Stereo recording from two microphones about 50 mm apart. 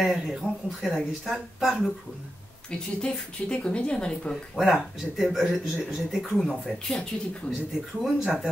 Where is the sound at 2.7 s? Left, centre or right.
Centre.